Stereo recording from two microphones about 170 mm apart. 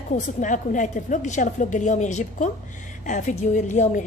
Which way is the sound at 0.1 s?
50° left (ahead or behind).